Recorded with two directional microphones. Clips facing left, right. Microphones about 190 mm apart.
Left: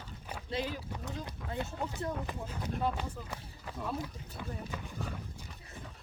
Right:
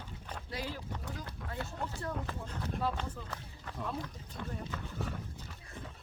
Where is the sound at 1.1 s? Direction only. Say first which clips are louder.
Left 2 dB; 20° left (ahead or behind).